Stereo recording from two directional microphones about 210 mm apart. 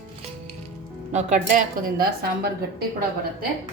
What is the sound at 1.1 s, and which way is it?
A woman's voice, 35° right (ahead or behind).